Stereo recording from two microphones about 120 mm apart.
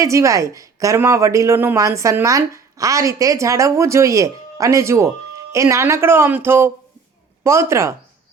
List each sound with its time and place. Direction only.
0.0 s a woman's voice: 25° right (ahead or behind)
1.5 s a woman's voice: 15° right (ahead or behind)